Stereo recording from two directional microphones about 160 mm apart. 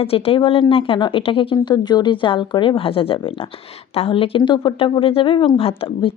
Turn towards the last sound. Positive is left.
turn(degrees=35)  # may be behind; listen again after turning